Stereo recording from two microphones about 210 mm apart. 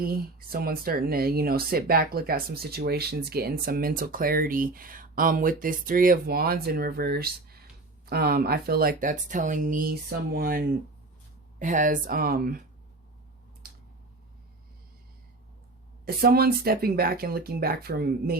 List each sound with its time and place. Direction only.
0.0 s speech: 45° right (ahead or behind)
13.6 s a sound: 45° right (ahead or behind)
16.0 s speech: 45° right (ahead or behind)